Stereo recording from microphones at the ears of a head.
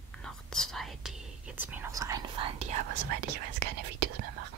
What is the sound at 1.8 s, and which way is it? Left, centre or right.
Whispering, right.